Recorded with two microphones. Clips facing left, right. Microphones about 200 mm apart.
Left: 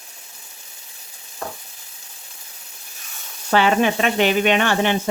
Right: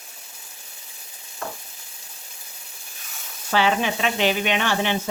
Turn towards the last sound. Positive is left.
turn(degrees=55)  # may be behind; listen again after turning